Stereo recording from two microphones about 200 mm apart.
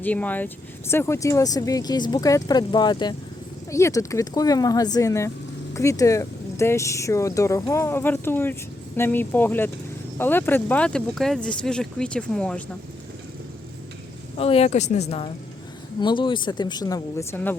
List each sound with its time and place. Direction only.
0.0 s speech: 10° left (ahead or behind)
14.3 s speech: 30° left (ahead or behind); by 17.6 s 10° left (ahead or behind)